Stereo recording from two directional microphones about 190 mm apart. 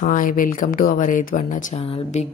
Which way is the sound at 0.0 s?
45° left (ahead or behind).